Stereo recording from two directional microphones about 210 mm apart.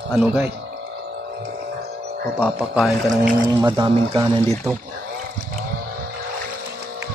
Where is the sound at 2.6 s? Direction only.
Centre (ahead or behind).